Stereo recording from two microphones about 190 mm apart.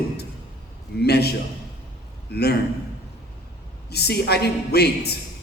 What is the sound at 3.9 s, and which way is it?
A man's voice, 60° left (ahead or behind).